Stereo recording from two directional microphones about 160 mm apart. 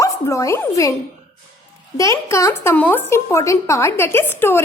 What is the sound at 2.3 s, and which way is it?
A woman's voice, 15° left (ahead or behind).